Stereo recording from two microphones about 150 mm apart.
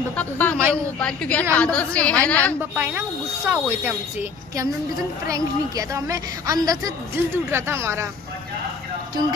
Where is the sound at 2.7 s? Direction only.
15° right (ahead or behind).